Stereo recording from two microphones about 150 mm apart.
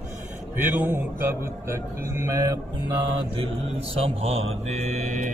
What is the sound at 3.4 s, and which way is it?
Speech, 40° right (ahead or behind).